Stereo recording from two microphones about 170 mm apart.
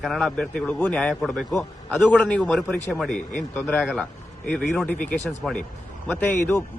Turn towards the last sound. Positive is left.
turn(degrees=15)  # may be behind; listen again after turning